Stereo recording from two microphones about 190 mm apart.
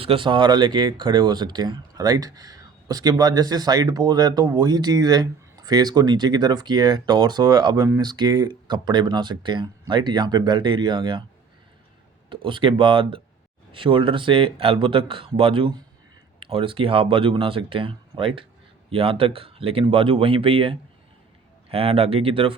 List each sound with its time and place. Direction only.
0.0 s speech: 30° right (ahead or behind)
12.3 s speech: 25° right (ahead or behind)